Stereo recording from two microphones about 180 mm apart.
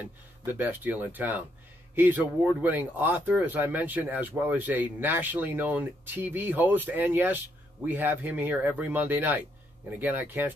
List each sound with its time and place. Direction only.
0.5 s speech: 10° right (ahead or behind)